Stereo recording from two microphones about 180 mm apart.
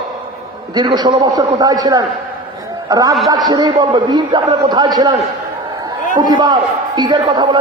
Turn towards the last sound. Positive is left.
turn(degrees=-25)  # may be behind; listen again after turning